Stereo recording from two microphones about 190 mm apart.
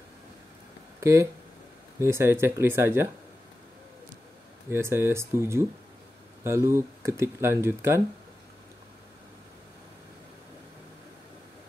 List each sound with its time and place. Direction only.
1.0 s speech: 15° right (ahead or behind)
4.6 s speech: 15° right (ahead or behind)